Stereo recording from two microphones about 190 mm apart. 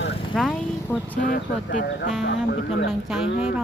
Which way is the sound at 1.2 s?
45° left (ahead or behind).